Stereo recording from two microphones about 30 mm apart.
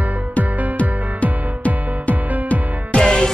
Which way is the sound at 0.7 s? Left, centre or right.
Left.